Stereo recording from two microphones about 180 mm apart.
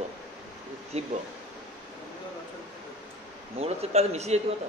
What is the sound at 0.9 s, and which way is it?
Speech, 35° right (ahead or behind).